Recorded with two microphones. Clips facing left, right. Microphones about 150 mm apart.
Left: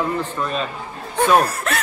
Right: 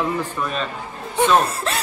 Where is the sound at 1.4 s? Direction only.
30° right (ahead or behind).